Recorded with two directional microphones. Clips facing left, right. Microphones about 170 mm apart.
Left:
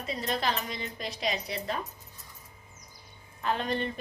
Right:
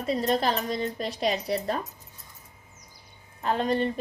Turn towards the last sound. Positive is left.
turn(degrees=-35)  # may be behind; listen again after turning